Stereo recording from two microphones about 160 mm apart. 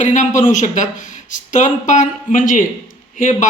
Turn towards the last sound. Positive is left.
turn(degrees=50)  # may be behind; listen again after turning